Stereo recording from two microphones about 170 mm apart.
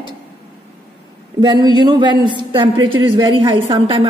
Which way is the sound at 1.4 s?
25° right (ahead or behind).